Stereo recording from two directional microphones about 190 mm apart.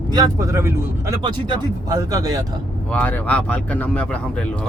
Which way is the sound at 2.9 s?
5° left (ahead or behind).